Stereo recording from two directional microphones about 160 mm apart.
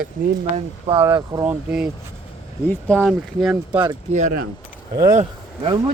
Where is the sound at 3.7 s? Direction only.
30° right (ahead or behind).